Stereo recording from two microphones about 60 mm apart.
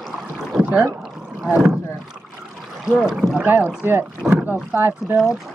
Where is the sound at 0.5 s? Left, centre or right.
Right.